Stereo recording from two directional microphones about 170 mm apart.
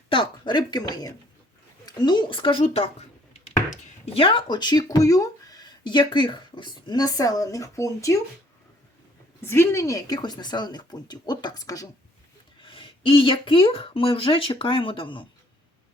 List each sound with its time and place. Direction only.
0.1 s speech: 25° left (ahead or behind)
9.4 s speech: 15° left (ahead or behind)
12.6 s a woman's voice: 30° left (ahead or behind)